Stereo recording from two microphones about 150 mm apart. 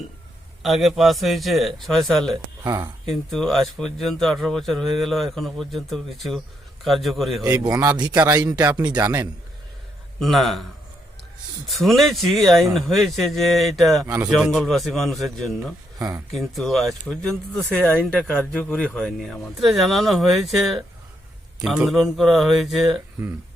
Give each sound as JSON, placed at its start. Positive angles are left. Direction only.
{"t": 0.6, "sound": "speech", "side_deg": 0}
{"t": 2.6, "sound": "a man's voice", "side_deg": -25}
{"t": 3.1, "sound": "speech", "side_deg": 0}
{"t": 7.9, "sound": "a man's voice", "side_deg": -30}
{"t": 8.1, "sound": "speech", "side_deg": -10}
{"t": 8.4, "sound": "a man's voice", "side_deg": -25}
{"t": 10.2, "sound": "speech", "side_deg": 0}
{"t": 11.7, "sound": "speech", "side_deg": 0}
{"t": 16.0, "sound": "speech", "side_deg": -20}
{"t": 16.3, "sound": "speech", "side_deg": 0}
{"t": 23.2, "sound": "speech", "side_deg": -15}